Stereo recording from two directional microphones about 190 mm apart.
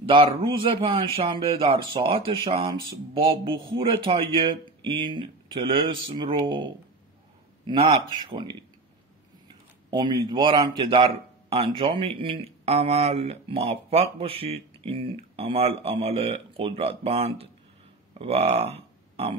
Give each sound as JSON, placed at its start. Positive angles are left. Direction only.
{"t": 0.1, "sound": "speech", "side_deg": -30}
{"t": 9.8, "sound": "speech", "side_deg": -25}